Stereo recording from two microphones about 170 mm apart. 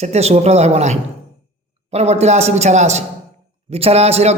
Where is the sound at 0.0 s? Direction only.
40° right (ahead or behind).